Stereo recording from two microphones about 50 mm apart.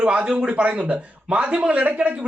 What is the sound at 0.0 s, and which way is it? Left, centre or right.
A man's voice, right.